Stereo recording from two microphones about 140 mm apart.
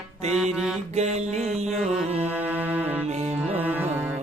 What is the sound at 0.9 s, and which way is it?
Music, 55° right (ahead or behind).